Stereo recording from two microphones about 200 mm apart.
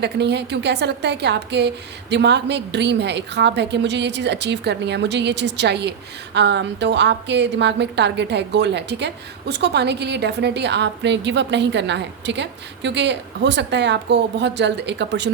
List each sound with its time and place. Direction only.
0.0 s a woman's voice: 60° right (ahead or behind)